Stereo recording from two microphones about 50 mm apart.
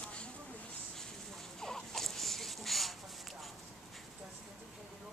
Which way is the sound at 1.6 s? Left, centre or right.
Centre.